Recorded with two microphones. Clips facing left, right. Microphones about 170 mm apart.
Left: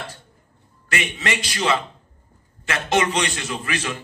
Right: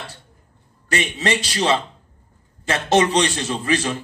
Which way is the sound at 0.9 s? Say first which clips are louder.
Right 4 dB; 35° right (ahead or behind).